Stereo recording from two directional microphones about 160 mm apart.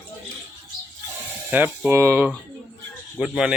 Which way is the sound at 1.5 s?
10° right (ahead or behind).